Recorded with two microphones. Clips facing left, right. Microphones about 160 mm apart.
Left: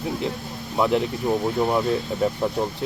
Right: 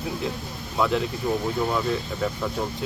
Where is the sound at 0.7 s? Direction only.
20° left (ahead or behind).